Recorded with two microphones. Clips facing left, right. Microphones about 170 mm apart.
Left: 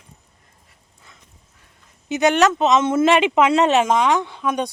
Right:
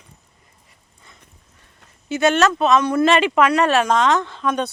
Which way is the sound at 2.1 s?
15° left (ahead or behind).